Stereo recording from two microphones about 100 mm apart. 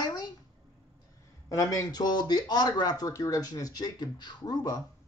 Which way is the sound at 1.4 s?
35° left (ahead or behind).